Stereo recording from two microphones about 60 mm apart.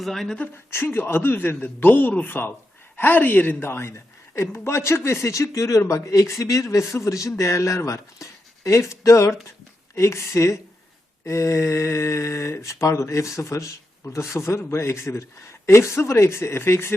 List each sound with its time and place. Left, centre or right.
0.0 s speech: centre
0.5 s a man's voice: left
3.7 s speech: left